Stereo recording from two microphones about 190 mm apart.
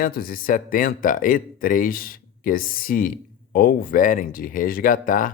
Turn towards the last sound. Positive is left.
turn(degrees=45)  # may be behind; listen again after turning